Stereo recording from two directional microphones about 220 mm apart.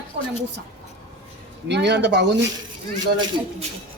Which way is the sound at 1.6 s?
50° right (ahead or behind).